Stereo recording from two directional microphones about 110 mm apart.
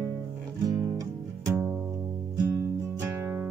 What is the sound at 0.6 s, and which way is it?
Music, 30° right (ahead or behind).